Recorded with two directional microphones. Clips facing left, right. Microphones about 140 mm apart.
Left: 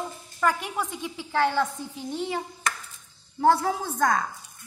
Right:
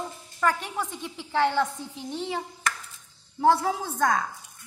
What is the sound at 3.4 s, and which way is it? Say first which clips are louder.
Speech: even; 5° right (ahead or behind).